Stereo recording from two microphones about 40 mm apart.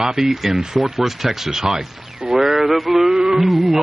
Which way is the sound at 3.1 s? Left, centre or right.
Centre.